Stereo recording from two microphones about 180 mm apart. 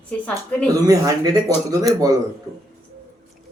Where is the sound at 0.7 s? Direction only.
20° right (ahead or behind).